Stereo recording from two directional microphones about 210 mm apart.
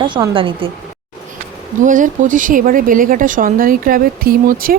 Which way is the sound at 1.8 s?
40° right (ahead or behind).